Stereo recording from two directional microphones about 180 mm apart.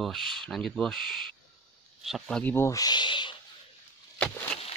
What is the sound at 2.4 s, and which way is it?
Speech, 10° left (ahead or behind).